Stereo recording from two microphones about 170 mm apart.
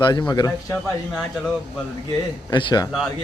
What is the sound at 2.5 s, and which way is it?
Speech, 25° left (ahead or behind).